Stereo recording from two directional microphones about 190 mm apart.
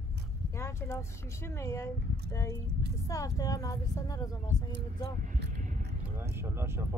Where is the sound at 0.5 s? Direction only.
15° left (ahead or behind).